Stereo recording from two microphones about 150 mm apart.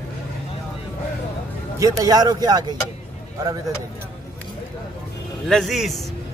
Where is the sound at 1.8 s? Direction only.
20° right (ahead or behind).